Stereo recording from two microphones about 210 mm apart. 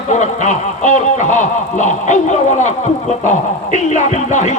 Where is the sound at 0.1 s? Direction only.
35° left (ahead or behind).